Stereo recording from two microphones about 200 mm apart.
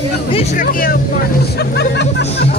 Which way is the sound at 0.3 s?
35° left (ahead or behind).